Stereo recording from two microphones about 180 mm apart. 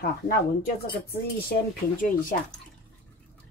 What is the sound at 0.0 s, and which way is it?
Speech, 55° left (ahead or behind).